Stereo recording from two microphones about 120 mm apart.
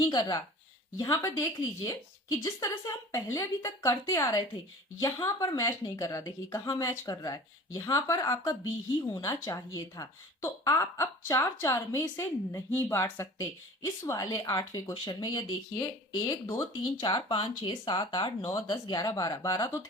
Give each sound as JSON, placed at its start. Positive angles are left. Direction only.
{"t": 0.0, "sound": "speech", "side_deg": 35}